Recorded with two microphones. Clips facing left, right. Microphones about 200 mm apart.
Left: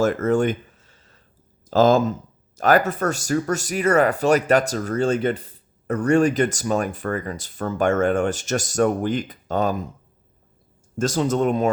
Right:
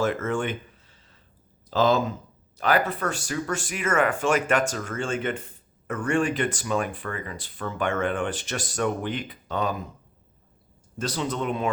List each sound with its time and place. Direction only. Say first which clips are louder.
0.0 s a sound: left 6 dB; 40° left (ahead or behind)
1.7 s speech: left 6 dB; 45° left (ahead or behind)
10.9 s speech: left 8 dB; 45° left (ahead or behind)